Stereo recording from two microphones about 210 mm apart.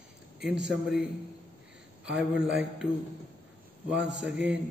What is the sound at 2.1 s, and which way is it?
Speech, 5° right (ahead or behind).